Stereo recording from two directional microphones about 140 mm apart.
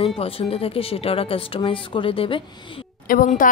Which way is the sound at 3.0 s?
90° left.